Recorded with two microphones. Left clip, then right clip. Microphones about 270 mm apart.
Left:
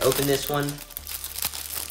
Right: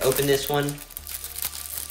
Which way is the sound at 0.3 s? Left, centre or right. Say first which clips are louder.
Right 2 dB; left.